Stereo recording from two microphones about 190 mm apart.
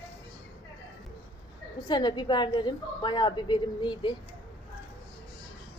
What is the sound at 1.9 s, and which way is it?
A woman's voice, 25° left (ahead or behind).